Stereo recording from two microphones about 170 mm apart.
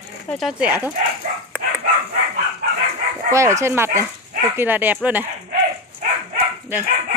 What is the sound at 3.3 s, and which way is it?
Speech, 15° right (ahead or behind).